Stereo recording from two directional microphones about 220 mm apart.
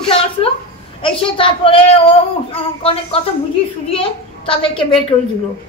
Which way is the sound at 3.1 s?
25° left (ahead or behind).